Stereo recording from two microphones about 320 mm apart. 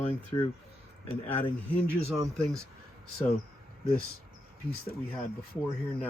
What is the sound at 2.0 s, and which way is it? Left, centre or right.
Speech, centre.